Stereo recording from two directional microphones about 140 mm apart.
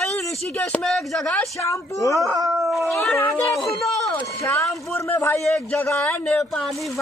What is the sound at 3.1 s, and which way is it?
Speech, 15° left (ahead or behind).